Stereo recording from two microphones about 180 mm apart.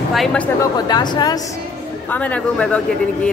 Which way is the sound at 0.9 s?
25° left (ahead or behind).